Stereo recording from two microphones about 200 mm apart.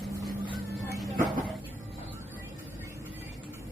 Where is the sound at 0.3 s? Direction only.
20° right (ahead or behind).